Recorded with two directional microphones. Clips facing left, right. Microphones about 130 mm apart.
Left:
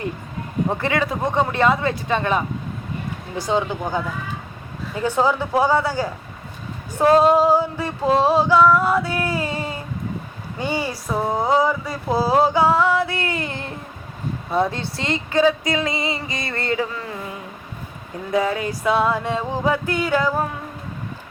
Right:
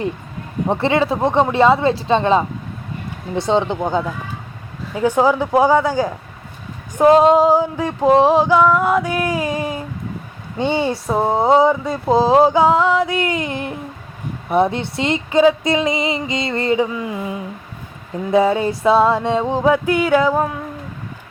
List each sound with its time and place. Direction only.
0.7 s speech: 25° right (ahead or behind)
4.9 s a sound: 15° right (ahead or behind)
10.6 s speech: 25° right (ahead or behind)
18.3 s speech: 25° right (ahead or behind); by 20.3 s 10° right (ahead or behind)